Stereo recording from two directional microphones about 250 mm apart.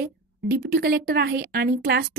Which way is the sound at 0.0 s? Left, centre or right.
Right.